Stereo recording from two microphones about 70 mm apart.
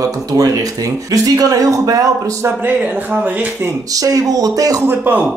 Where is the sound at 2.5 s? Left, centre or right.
Right.